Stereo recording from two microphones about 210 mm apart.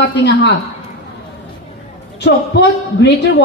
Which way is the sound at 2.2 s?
55° left (ahead or behind).